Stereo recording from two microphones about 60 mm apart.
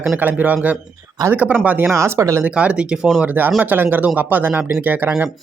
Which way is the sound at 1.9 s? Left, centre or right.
Right.